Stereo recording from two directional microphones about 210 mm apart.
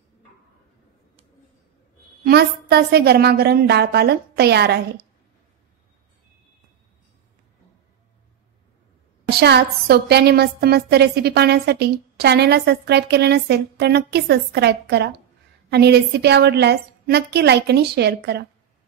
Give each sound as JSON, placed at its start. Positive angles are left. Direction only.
{"t": 2.2, "sound": "a woman's voice", "side_deg": -50}
{"t": 9.3, "sound": "a woman's voice", "side_deg": -50}